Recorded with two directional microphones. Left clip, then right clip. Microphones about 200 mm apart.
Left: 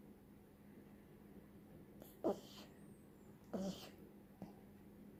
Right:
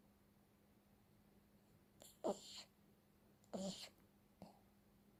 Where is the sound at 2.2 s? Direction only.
25° right (ahead or behind).